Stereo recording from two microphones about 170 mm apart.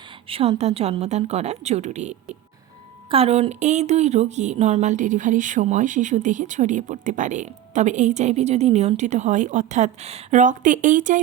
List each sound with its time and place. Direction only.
0.3 s speech: 35° right (ahead or behind)